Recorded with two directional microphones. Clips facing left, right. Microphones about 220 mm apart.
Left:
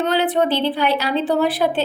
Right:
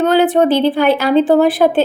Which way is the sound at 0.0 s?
45° right (ahead or behind).